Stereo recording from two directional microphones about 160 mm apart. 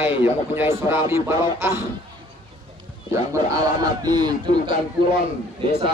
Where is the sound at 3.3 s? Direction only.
25° right (ahead or behind).